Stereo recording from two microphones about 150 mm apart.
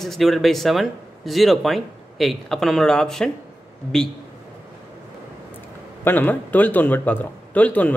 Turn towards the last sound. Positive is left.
turn(degrees=10)  # may be behind; listen again after turning